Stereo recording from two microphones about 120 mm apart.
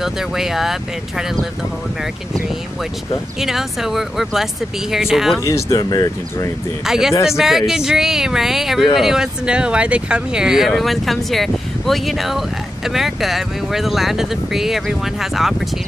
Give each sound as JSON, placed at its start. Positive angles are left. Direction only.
{"t": 0.0, "sound": "speech", "side_deg": -5}
{"t": 3.3, "sound": "speech", "side_deg": -5}
{"t": 5.4, "sound": "speech", "side_deg": 25}
{"t": 6.9, "sound": "speech", "side_deg": -5}